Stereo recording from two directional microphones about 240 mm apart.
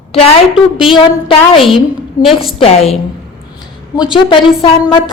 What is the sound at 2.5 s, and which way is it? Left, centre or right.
A woman's voice, left.